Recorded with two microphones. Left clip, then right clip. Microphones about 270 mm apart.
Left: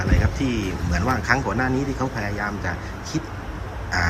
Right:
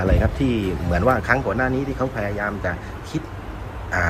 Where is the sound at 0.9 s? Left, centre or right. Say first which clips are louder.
Right 3 dB; centre.